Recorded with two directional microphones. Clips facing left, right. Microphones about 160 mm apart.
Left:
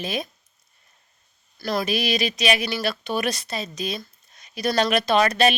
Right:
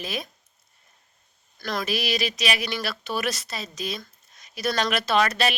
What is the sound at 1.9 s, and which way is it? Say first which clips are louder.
Speech: left 3 dB; 20° left (ahead or behind).